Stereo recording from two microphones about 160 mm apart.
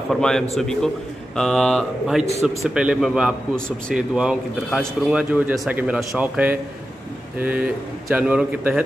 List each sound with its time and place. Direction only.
0.1 s a man's voice: 5° left (ahead or behind)